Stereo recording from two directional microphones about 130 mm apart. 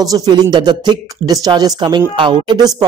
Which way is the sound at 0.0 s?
30° right (ahead or behind).